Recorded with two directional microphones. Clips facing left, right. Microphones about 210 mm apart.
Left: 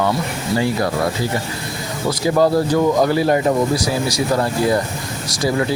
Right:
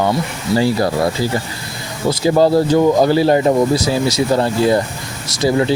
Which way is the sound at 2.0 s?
25° right (ahead or behind).